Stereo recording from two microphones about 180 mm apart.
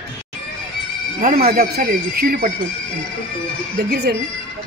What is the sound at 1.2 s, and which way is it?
Speech, 55° right (ahead or behind).